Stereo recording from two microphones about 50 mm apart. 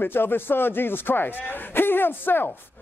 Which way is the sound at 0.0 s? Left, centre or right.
Left.